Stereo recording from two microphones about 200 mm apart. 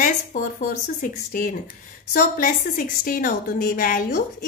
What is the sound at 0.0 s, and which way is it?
A woman's voice, 40° left (ahead or behind).